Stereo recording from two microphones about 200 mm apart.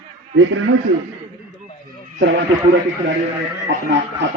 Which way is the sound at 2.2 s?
60° right (ahead or behind).